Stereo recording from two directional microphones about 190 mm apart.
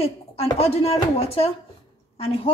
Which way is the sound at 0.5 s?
30° left (ahead or behind).